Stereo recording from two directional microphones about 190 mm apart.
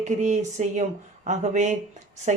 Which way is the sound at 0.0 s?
40° right (ahead or behind).